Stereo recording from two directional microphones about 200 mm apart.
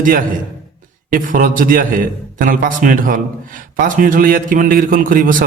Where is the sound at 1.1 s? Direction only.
45° right (ahead or behind).